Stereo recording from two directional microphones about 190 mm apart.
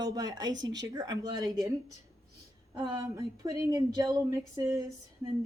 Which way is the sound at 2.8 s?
15° right (ahead or behind).